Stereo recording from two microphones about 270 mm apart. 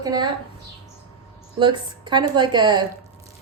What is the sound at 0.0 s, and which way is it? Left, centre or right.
Speech, centre.